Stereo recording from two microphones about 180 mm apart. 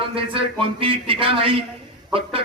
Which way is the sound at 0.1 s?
30° right (ahead or behind).